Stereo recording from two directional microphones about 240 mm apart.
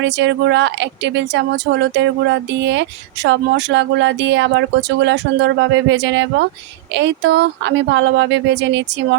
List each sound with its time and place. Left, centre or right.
0.0 s speech: right